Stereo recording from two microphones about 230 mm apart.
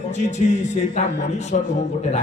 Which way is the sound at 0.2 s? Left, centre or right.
Left.